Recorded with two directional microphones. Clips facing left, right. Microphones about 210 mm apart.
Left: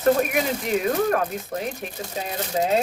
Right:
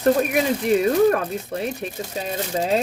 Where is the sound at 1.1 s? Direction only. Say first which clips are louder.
Right 2 dB; 35° right (ahead or behind).